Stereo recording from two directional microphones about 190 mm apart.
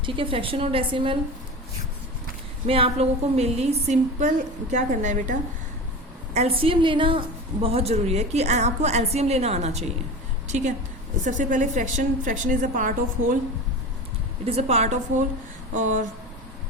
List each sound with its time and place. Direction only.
0.0 s a woman's voice: 25° right (ahead or behind)
2.6 s a woman's voice: 30° right (ahead or behind)
14.4 s a woman's voice: 30° right (ahead or behind)